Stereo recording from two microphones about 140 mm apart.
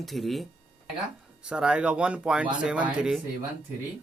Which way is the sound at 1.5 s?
5° right (ahead or behind).